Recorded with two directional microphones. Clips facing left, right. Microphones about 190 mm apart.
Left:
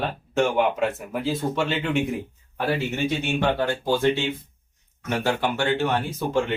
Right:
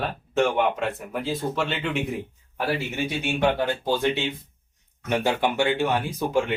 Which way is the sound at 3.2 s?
15° right (ahead or behind).